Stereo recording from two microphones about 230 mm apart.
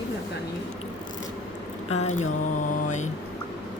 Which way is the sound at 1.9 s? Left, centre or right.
Left.